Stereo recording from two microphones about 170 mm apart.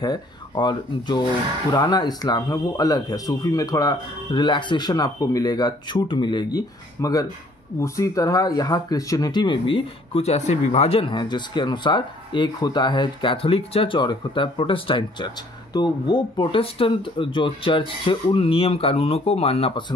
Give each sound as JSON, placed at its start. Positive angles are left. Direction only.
{"t": 0.0, "sound": "speech", "side_deg": 25}